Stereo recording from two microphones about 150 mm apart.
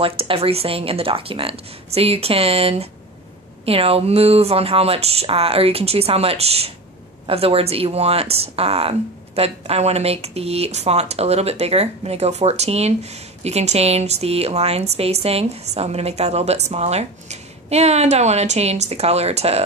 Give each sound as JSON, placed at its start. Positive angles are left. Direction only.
{"t": 0.2, "sound": "speech", "side_deg": -40}